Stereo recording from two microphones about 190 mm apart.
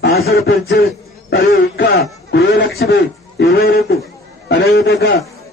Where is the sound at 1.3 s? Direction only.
55° left (ahead or behind).